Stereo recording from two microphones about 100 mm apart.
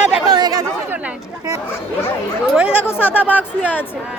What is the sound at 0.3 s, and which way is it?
Chatter, 40° right (ahead or behind).